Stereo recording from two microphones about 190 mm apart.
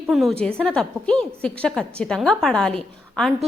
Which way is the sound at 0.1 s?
Centre (ahead or behind).